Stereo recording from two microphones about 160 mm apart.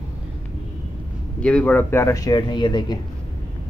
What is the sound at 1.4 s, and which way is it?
Speech, 10° left (ahead or behind).